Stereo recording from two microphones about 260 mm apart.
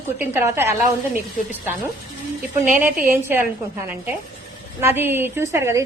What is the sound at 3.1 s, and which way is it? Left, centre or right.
Speech, centre.